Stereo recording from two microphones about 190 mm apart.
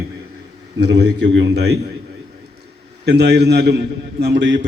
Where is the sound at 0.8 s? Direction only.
60° right (ahead or behind).